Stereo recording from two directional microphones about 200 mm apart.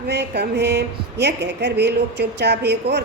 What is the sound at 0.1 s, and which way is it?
A woman's voice, 55° right (ahead or behind).